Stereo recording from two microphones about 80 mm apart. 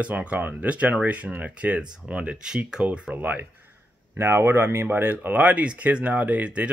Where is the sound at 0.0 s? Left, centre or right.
Centre.